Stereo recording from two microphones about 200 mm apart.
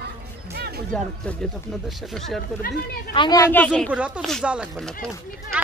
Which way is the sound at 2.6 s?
50° left (ahead or behind).